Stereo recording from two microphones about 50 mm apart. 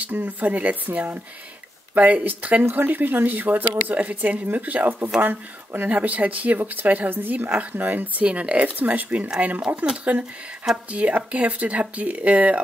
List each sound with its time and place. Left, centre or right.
0.0 s speech: right
8.3 s speech: right